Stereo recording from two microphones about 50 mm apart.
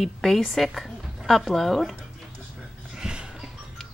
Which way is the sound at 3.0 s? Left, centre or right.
Centre.